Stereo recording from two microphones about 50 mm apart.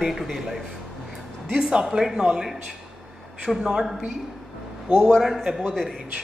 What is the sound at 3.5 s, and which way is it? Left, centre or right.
Speech, centre.